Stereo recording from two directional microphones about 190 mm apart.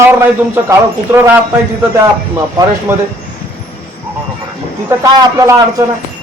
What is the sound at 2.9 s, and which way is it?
Speech, 15° right (ahead or behind).